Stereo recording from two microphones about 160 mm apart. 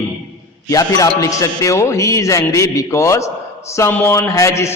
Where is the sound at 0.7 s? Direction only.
20° left (ahead or behind).